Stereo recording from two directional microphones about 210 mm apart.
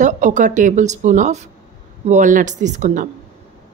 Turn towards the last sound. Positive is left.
turn(degrees=-35)  # may be behind; listen again after turning